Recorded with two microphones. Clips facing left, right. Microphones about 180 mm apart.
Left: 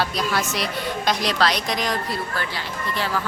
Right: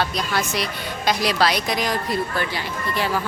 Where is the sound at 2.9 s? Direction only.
15° right (ahead or behind).